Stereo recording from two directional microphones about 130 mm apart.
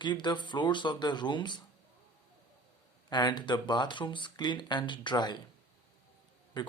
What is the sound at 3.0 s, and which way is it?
Speech, 35° left (ahead or behind).